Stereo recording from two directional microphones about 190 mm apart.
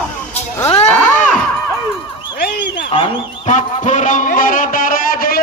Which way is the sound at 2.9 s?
25° left (ahead or behind).